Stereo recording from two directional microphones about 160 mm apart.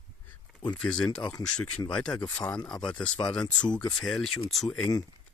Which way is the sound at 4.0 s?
5° left (ahead or behind).